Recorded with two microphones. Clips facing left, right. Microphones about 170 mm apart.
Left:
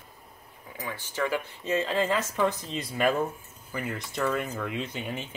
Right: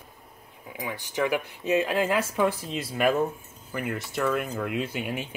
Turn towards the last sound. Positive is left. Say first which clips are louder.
# right 3 dB
turn(degrees=-10)  # may be behind; listen again after turning